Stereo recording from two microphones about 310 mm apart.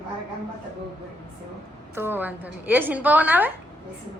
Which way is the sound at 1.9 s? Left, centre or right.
Centre.